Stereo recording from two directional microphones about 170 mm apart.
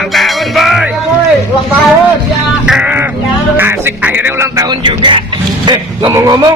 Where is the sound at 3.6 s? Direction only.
10° right (ahead or behind); by 5.2 s 30° right (ahead or behind).